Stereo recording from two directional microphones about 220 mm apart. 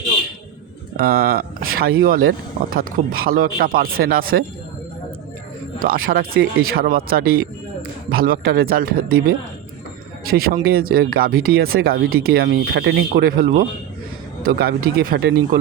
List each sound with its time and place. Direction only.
0.9 s speech: 45° right (ahead or behind)
5.8 s speech: 40° right (ahead or behind)